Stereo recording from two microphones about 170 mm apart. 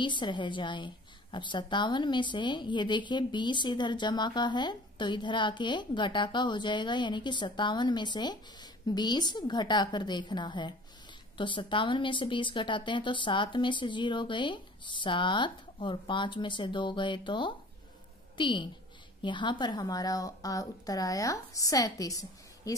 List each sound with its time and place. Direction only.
0.0 s a woman's voice: 25° left (ahead or behind)